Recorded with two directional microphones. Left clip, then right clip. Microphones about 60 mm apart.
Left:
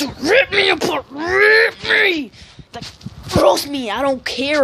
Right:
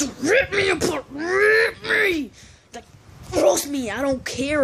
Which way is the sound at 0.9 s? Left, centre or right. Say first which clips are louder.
Left 5 dB; right.